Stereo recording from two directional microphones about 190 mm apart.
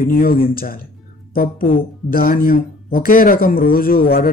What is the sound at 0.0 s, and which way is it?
Speech, 50° left (ahead or behind).